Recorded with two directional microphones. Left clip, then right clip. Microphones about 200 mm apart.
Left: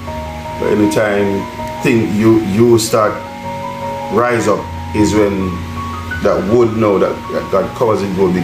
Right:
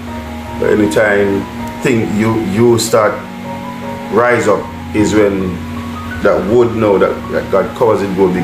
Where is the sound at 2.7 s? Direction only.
15° left (ahead or behind).